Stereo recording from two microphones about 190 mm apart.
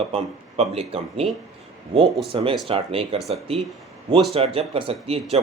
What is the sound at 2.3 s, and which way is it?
Speech, 30° right (ahead or behind).